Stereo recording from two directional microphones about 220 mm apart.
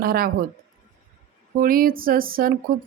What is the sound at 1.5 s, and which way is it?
Speech, 40° right (ahead or behind).